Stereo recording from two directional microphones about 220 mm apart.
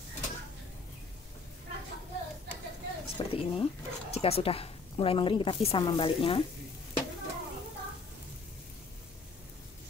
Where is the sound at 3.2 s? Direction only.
20° left (ahead or behind).